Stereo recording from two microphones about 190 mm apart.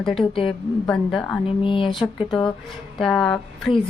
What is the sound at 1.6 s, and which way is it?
Speech, 25° left (ahead or behind).